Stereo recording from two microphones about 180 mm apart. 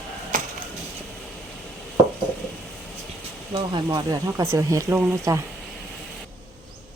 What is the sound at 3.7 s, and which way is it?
Speech, 25° right (ahead or behind).